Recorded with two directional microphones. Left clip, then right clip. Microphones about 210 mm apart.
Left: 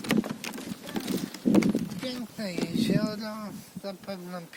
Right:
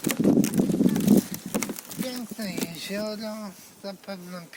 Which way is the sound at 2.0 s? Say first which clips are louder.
Right 1 dB; 15° left (ahead or behind).